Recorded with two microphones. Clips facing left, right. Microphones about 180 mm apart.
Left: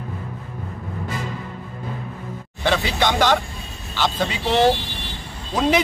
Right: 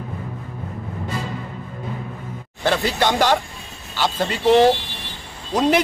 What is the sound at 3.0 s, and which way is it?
Speech, 10° right (ahead or behind).